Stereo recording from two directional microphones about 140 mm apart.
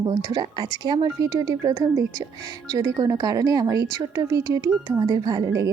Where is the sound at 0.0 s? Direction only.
25° right (ahead or behind).